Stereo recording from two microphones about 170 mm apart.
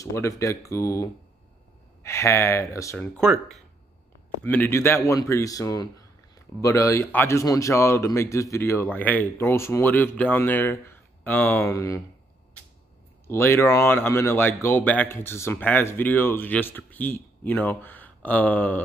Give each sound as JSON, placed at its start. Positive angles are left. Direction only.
{"t": 0.0, "sound": "speech", "side_deg": 20}
{"t": 2.0, "sound": "speech", "side_deg": 15}
{"t": 3.2, "sound": "speech", "side_deg": 0}
{"t": 4.5, "sound": "speech", "side_deg": 10}
{"t": 13.3, "sound": "speech", "side_deg": 15}